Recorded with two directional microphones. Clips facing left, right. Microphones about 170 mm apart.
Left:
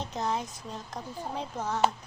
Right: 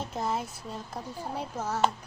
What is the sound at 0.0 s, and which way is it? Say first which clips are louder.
A child's voice: even; 5° right (ahead or behind).